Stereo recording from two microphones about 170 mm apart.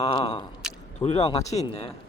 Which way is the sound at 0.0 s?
30° left (ahead or behind).